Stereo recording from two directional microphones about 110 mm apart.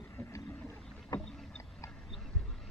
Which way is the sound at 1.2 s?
5° left (ahead or behind).